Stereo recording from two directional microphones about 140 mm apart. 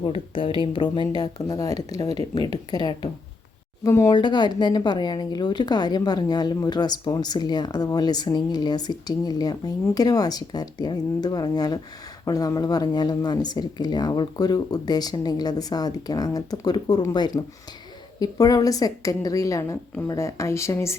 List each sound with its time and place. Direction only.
0.1 s a woman's voice: 40° left (ahead or behind); by 4.1 s 20° left (ahead or behind)
4.1 s a woman's voice: 35° left (ahead or behind)